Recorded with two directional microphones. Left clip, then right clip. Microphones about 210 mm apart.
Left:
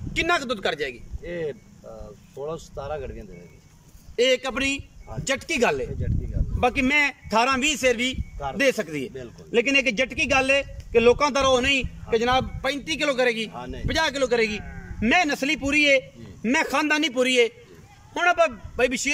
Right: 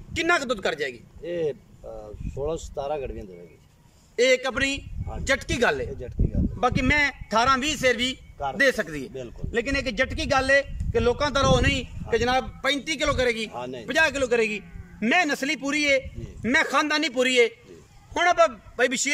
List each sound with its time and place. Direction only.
0.1 s a man's voice: centre (ahead or behind)
1.2 s speech: 15° right (ahead or behind)
4.2 s a man's voice: centre (ahead or behind)
13.5 s speech: 15° right (ahead or behind)
13.8 s a man's voice: 5° right (ahead or behind)